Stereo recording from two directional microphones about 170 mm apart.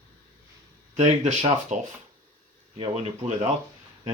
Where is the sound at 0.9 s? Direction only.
40° right (ahead or behind).